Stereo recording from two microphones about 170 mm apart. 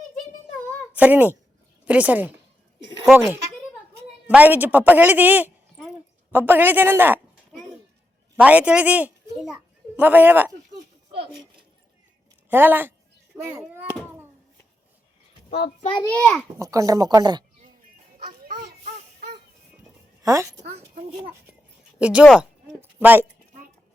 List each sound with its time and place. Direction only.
0.9 s a woman's voice: 10° right (ahead or behind)
4.3 s a woman's voice: 10° right (ahead or behind)
8.4 s a child's voice: 10° right (ahead or behind)
12.5 s a woman's voice: 10° right (ahead or behind)
13.3 s a sound: 15° right (ahead or behind)
15.8 s a child's voice: 30° left (ahead or behind)
16.0 s a child's voice: 5° left (ahead or behind)
16.6 s speech: 20° right (ahead or behind)
18.2 s children playing: 60° right (ahead or behind)
20.2 s a woman's voice: 20° right (ahead or behind)
21.9 s a woman's voice: 5° right (ahead or behind)